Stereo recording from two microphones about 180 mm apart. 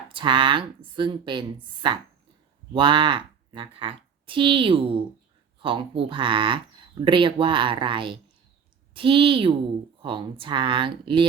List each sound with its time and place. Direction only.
0.1 s speech: 25° right (ahead or behind)